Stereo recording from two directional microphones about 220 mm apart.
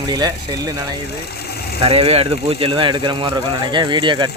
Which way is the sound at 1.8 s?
25° right (ahead or behind).